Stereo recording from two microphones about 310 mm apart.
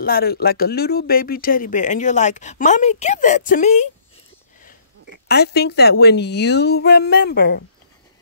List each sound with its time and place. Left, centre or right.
0.0 s speech: left
5.3 s speech: left